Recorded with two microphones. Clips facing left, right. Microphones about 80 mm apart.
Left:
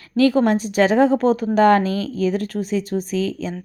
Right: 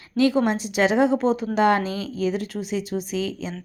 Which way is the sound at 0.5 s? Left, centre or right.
Left.